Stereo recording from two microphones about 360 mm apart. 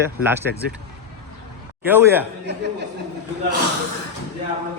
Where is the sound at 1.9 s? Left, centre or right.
Centre.